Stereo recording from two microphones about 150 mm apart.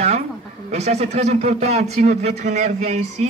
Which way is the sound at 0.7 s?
45° right (ahead or behind).